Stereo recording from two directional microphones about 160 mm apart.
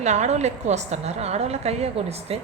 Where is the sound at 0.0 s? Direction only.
45° right (ahead or behind).